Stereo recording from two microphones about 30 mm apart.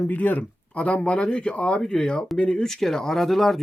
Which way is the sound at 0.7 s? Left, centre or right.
Left.